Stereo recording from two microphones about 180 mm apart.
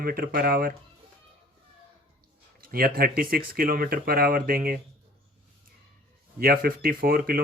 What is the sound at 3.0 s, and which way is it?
Speech, 55° right (ahead or behind).